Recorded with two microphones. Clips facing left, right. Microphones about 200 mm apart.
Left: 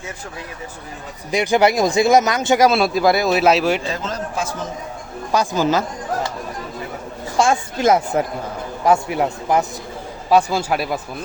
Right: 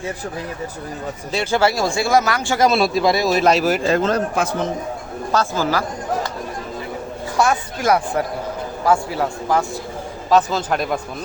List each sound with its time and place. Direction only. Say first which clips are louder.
1.3 s speech: left 3 dB; 15° left (ahead or behind)
2.6 s speech: right 3 dB; centre (ahead or behind)
3.8 s a man's voice: right 8 dB; 60° right (ahead or behind)
5.3 s speech: left 2 dB; 15° left (ahead or behind)
7.3 s speech: left 2 dB; 25° left (ahead or behind); by 11.0 s 5° left (ahead or behind)